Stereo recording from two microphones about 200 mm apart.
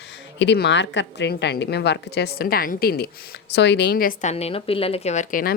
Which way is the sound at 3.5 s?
60° left (ahead or behind).